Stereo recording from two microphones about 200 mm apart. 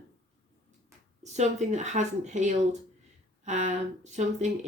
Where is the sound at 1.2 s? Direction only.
35° right (ahead or behind).